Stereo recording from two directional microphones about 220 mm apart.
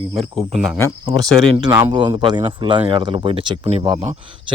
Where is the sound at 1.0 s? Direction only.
20° right (ahead or behind).